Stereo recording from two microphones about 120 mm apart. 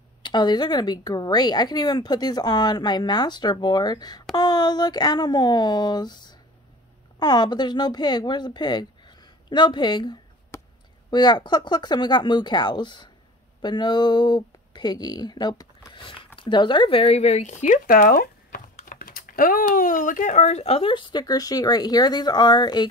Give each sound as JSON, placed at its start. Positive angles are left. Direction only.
{"t": 0.2, "sound": "speech", "side_deg": 40}
{"t": 10.5, "sound": "a sound", "side_deg": 25}
{"t": 11.1, "sound": "speech", "side_deg": 35}
{"t": 19.7, "sound": "speech", "side_deg": 90}